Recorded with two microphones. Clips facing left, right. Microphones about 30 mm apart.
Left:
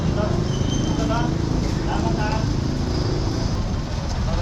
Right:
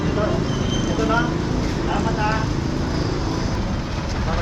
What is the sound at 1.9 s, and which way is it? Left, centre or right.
Vehicle, right.